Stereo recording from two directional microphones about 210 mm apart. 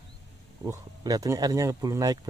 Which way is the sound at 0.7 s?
15° right (ahead or behind).